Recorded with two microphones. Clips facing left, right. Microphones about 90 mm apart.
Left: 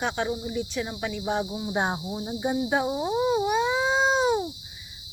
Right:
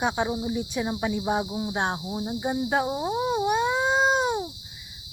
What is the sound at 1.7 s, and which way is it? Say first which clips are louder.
Speech: left 1 dB; 5° left (ahead or behind).